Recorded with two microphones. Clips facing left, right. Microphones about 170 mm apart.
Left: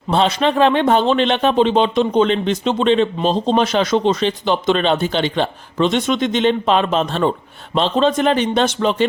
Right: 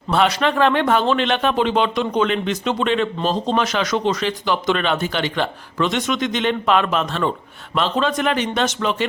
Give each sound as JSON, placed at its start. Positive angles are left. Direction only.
{"t": 0.1, "sound": "speech", "side_deg": 25}